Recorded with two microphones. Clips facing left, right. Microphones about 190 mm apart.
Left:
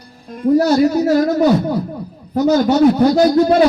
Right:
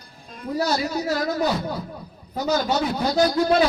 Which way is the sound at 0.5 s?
45° left (ahead or behind).